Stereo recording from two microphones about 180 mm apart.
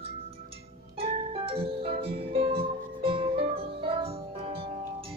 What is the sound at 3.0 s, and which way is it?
Music, 30° right (ahead or behind).